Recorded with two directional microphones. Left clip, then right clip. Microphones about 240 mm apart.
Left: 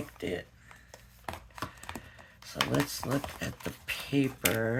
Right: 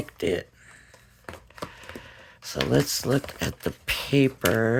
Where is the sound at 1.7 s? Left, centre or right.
Right.